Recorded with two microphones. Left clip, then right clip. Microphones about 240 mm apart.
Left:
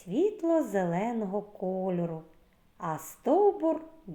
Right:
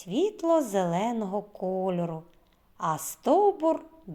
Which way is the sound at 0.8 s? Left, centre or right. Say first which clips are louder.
Right 3 dB; right.